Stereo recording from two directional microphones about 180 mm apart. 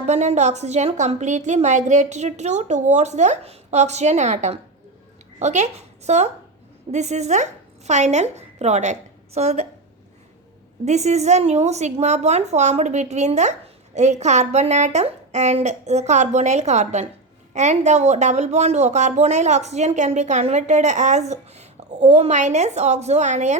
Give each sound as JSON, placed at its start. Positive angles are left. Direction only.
{"t": 0.0, "sound": "a woman's voice", "side_deg": -40}
{"t": 10.8, "sound": "a woman's voice", "side_deg": -40}